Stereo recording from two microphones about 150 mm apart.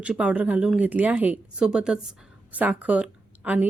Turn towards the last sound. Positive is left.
turn(degrees=-5)  # may be behind; listen again after turning